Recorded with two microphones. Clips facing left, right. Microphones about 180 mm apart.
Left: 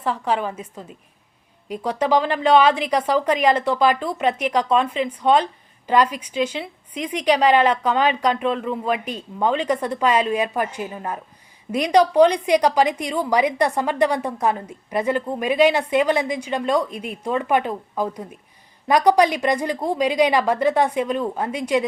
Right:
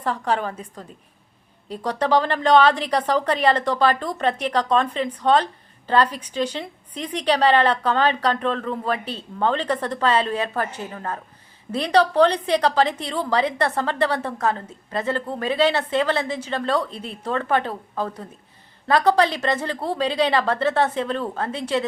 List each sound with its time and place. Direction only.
0.0 s a woman's voice: 10° left (ahead or behind)